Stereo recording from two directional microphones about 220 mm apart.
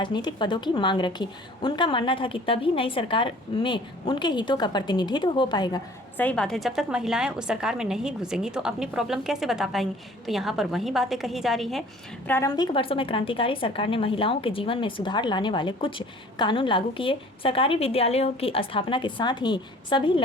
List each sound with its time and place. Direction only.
0.0 s a woman's voice: 20° left (ahead or behind)
6.1 s a woman's voice: 5° left (ahead or behind)
12.3 s a woman's voice: 15° left (ahead or behind)